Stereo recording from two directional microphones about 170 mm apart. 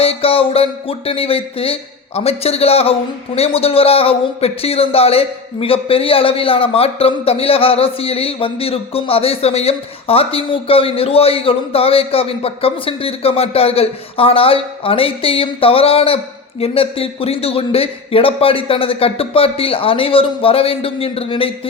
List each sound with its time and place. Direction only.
0.0 s speech: 35° left (ahead or behind)